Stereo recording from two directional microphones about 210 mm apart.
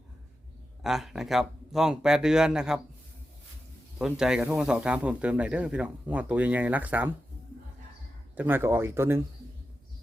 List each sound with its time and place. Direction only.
0.8 s speech: centre (ahead or behind)
3.9 s speech: 5° right (ahead or behind)
8.4 s speech: 10° right (ahead or behind)